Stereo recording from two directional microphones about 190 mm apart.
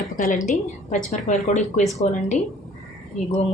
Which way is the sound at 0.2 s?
40° left (ahead or behind).